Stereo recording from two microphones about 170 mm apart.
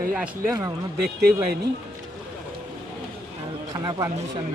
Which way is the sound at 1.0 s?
65° right (ahead or behind).